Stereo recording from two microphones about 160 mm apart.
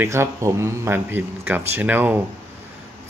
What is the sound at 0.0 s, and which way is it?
Speech, 15° right (ahead or behind).